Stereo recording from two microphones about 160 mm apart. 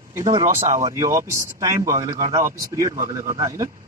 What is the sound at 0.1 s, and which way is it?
A man's voice, 25° right (ahead or behind).